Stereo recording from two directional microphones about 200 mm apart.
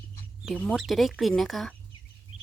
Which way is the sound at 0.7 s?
Centre (ahead or behind).